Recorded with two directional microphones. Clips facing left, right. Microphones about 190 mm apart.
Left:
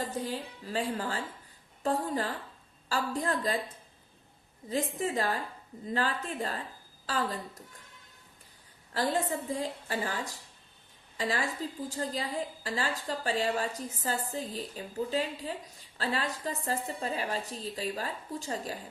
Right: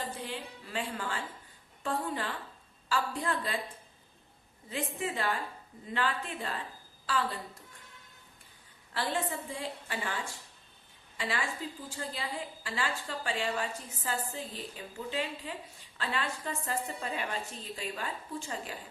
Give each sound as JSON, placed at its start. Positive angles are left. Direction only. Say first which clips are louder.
{"t": 0.1, "sound": "a woman's voice", "louder": "left 5 dB", "side_deg": 40}
{"t": 4.7, "sound": "a woman's voice", "louder": "left 4 dB", "side_deg": 40}
{"t": 8.9, "sound": "a woman's voice", "louder": "left 4 dB", "side_deg": 40}